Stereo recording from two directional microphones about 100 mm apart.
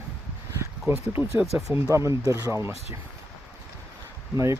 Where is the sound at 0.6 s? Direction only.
25° right (ahead or behind).